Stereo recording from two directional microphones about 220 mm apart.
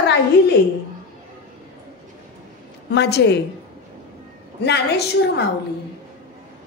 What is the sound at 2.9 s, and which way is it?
Speech, 50° left (ahead or behind).